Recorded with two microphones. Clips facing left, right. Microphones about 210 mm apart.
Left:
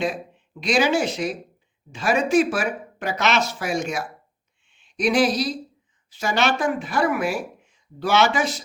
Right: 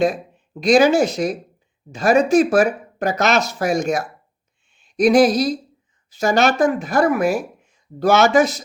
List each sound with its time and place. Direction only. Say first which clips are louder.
0.6 s speech: right 7 dB; 40° right (ahead or behind)
4.8 s a sound: right 7 dB; 40° right (ahead or behind)
6.1 s speech: right 6 dB; 40° right (ahead or behind)